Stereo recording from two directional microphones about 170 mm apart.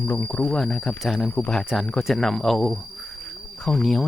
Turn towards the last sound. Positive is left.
turn(degrees=0)  # may be behind; listen again after turning